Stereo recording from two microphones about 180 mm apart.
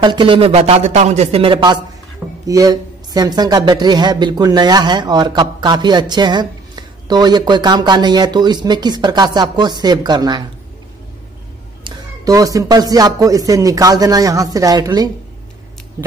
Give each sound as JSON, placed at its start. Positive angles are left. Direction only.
{"t": 0.0, "sound": "speech", "side_deg": -25}
{"t": 11.8, "sound": "speech", "side_deg": -20}